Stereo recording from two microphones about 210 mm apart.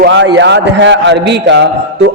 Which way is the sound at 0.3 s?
55° right (ahead or behind).